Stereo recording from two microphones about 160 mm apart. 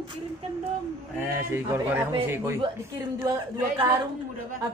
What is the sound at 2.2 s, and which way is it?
Speech, 15° right (ahead or behind).